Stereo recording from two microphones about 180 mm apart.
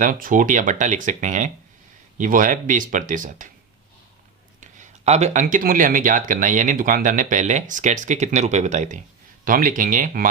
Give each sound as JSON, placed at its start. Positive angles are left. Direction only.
{"t": 0.0, "sound": "speech", "side_deg": -50}
{"t": 4.6, "sound": "speech", "side_deg": -40}